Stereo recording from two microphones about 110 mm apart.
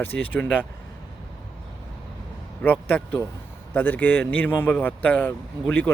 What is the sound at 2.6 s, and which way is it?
Speech, 15° left (ahead or behind).